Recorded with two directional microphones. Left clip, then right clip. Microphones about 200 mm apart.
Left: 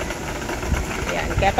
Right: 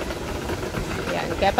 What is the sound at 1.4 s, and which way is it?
Speech, 10° right (ahead or behind).